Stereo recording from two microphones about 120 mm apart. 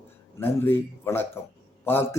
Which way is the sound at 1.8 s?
20° left (ahead or behind).